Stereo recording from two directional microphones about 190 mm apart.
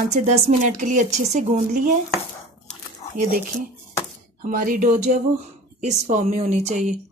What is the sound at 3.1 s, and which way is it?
Speech, 45° right (ahead or behind).